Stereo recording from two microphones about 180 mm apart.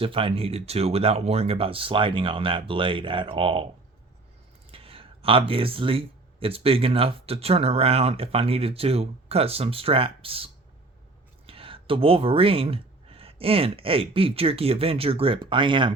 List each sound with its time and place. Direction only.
0.0 s speech: 30° right (ahead or behind)
4.7 s speech: 30° right (ahead or behind)